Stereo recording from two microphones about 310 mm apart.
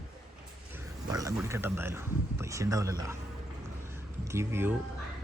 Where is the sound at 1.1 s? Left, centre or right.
Centre.